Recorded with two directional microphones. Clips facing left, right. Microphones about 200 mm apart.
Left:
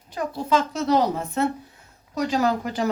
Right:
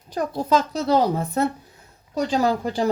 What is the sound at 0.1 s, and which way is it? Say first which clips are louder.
Speech: right 2 dB; 40° right (ahead or behind).